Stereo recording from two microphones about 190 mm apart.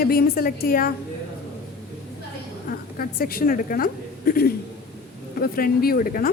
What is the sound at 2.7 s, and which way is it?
A woman's voice, 50° left (ahead or behind).